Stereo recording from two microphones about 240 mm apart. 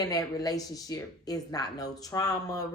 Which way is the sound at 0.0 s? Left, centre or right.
Centre.